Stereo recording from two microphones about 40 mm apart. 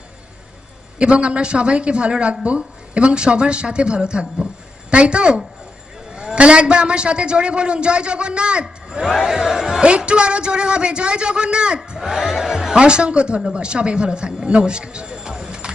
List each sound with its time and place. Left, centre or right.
0.9 s a woman's voice: right
9.0 s speech: centre
9.8 s a woman's voice: right
12.0 s speech: centre
12.7 s a woman's voice: right